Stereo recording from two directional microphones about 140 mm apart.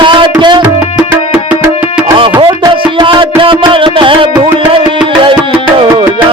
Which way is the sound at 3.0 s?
35° right (ahead or behind).